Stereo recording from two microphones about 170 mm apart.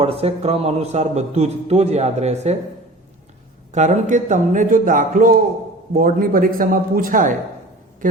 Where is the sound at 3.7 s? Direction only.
45° right (ahead or behind).